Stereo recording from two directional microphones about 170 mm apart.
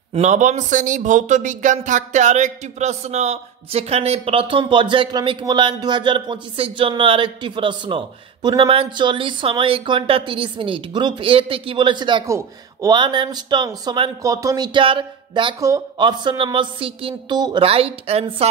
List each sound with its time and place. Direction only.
0.1 s speech: 45° right (ahead or behind)